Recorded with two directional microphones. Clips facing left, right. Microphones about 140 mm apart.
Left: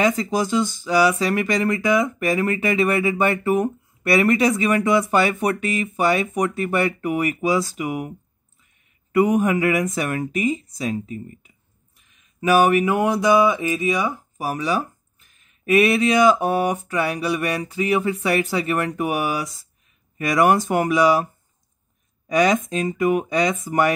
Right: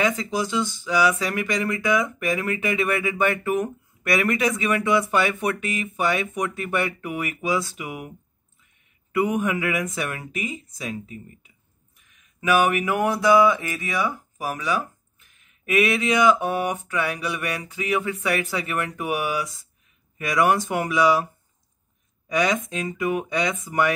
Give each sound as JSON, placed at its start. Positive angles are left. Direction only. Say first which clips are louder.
{"t": 0.0, "sound": "speech", "louder": "left 4 dB", "side_deg": 40}
{"t": 9.1, "sound": "speech", "louder": "left 5 dB", "side_deg": 40}
{"t": 12.4, "sound": "speech", "louder": "left 4 dB", "side_deg": 35}
{"t": 12.8, "sound": "speech", "louder": "left 2 dB", "side_deg": 20}
{"t": 14.4, "sound": "speech", "louder": "left 3 dB", "side_deg": 35}
{"t": 22.3, "sound": "speech", "louder": "left 5 dB", "side_deg": 40}